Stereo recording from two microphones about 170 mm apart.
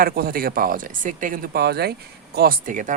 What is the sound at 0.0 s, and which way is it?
Speech, 60° right (ahead or behind).